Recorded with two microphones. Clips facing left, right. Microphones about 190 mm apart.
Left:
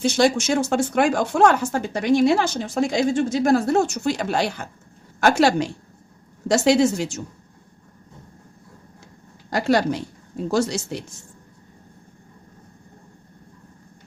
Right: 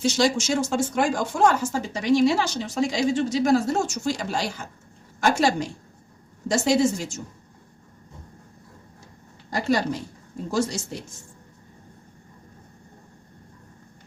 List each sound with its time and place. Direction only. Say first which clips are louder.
0.0 s a woman's voice: left 3 dB; 55° left (ahead or behind); by 7.2 s 70° left (ahead or behind)
9.5 s a woman's voice: left 4 dB; 70° left (ahead or behind)